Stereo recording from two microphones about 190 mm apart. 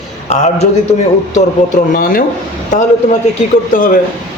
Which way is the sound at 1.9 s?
50° left (ahead or behind).